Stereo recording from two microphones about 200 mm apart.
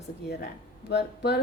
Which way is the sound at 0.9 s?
55° left (ahead or behind).